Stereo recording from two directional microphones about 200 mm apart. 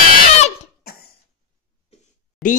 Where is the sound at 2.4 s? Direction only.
Centre (ahead or behind).